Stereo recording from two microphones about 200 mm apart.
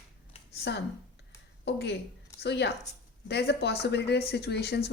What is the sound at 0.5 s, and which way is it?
Speech, 60° left (ahead or behind).